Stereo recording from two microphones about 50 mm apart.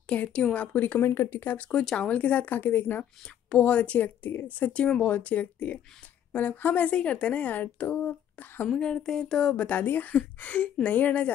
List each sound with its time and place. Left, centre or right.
0.0 s speech: left
0.9 s speech: left
1.3 s a woman's voice: left
1.6 s a woman's voice: left
3.4 s a woman's voice: left
4.7 s a woman's voice: left
8.6 s speech: centre; by 11.3 s left